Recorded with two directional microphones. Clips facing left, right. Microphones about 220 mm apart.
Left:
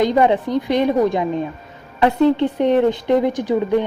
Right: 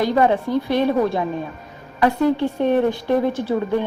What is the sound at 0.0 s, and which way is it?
A woman's voice, 20° left (ahead or behind).